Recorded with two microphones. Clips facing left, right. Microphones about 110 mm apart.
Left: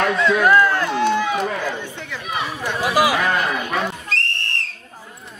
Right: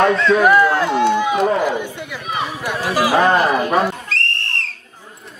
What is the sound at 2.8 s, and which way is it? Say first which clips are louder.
Speech: left 1 dB; 15° left (ahead or behind).